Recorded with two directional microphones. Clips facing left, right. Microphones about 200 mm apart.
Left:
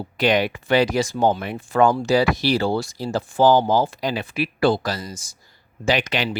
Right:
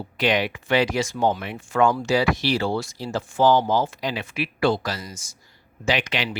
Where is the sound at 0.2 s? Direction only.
40° left (ahead or behind).